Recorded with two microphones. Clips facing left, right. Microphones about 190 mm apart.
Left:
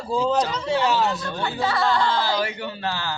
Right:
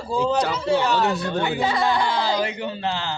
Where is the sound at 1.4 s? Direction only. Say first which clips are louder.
Even; 15° right (ahead or behind).